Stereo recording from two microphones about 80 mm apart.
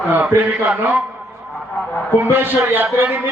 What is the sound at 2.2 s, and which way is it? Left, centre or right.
Speech, right.